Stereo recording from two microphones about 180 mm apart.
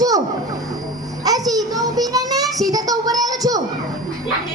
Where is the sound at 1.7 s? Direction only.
20° right (ahead or behind).